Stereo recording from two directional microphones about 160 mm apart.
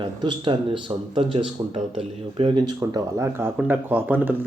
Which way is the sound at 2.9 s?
15° right (ahead or behind).